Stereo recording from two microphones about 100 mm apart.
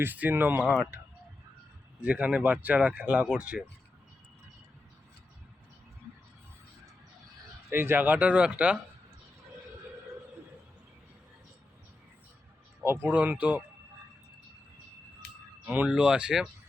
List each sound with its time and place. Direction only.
0.0 s speech: 20° right (ahead or behind)
0.6 s speech: 5° left (ahead or behind)
2.0 s speech: 15° right (ahead or behind)
7.7 s speech: 20° right (ahead or behind)
12.8 s speech: 25° right (ahead or behind)
15.6 s speech: 15° right (ahead or behind)